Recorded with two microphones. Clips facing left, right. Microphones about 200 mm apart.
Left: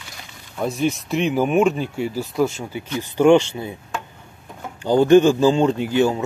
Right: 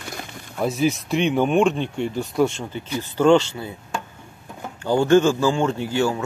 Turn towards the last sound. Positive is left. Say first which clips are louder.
# left 3 dB
turn(degrees=20)  # may be behind; listen again after turning